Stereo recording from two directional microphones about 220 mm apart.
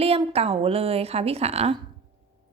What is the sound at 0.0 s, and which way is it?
A woman's voice, 25° right (ahead or behind).